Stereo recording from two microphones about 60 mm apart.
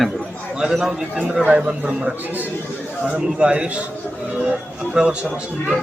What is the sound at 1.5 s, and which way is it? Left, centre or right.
Speech, right.